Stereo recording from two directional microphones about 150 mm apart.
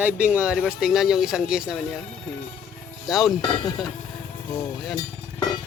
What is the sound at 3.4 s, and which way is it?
Stir, 30° left (ahead or behind).